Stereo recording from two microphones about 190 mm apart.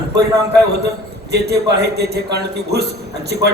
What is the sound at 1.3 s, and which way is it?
A man's voice, 60° right (ahead or behind).